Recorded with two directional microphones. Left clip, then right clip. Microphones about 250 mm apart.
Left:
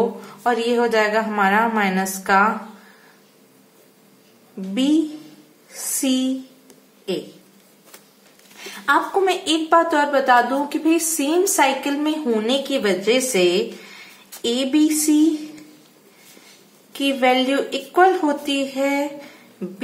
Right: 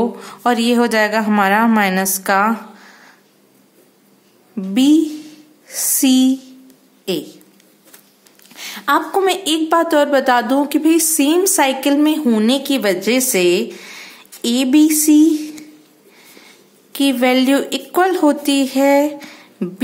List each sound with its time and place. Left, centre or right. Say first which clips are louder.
0.2 s a woman's voice: right 4 dB; right
4.7 s a woman's voice: right 6 dB; right
8.5 s a woman's voice: right 2 dB; right
16.9 s a woman's voice: right 3 dB; right